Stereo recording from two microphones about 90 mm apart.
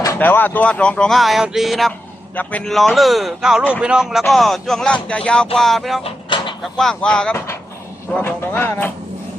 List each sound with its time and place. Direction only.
0.2 s speech: 20° left (ahead or behind); by 1.9 s centre (ahead or behind)
2.3 s speech: 15° left (ahead or behind)
2.6 s speech: centre (ahead or behind)
6.1 s vehicle: 65° left (ahead or behind)
6.7 s speech: 5° left (ahead or behind)
8.4 s speech: 25° left (ahead or behind)